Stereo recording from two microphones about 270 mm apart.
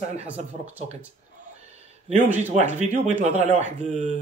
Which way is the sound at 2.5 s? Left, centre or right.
Right.